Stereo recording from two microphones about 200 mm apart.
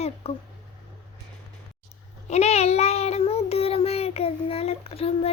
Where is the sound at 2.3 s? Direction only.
35° left (ahead or behind).